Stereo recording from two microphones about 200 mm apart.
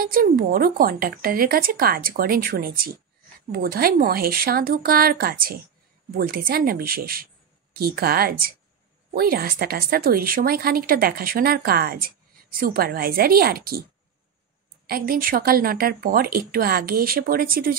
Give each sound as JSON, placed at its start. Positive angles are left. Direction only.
{"t": 0.0, "sound": "speech", "side_deg": -45}
{"t": 14.9, "sound": "speech", "side_deg": -45}